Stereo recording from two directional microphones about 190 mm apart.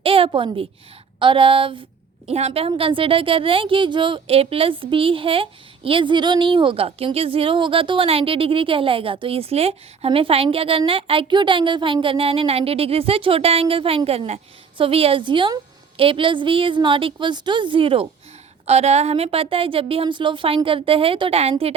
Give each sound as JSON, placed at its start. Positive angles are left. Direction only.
{"t": 0.0, "sound": "a woman's voice", "side_deg": -30}